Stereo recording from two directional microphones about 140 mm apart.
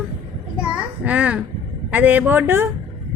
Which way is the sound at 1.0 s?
10° right (ahead or behind).